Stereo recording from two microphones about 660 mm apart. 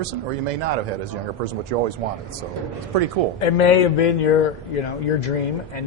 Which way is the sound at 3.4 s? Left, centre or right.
Left.